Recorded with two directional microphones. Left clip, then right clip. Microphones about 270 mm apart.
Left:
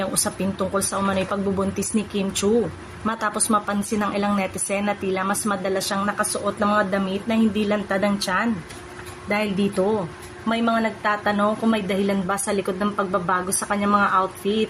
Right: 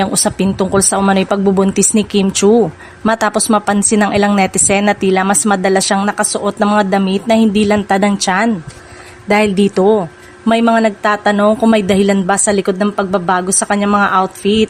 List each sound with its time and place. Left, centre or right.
0.0 s a woman's voice: right